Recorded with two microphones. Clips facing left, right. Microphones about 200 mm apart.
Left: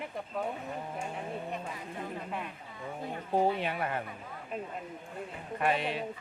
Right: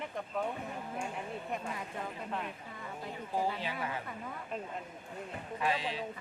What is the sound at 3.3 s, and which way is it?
Speech, 60° left (ahead or behind).